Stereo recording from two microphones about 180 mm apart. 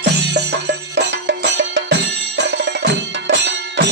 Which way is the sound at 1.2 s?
80° right.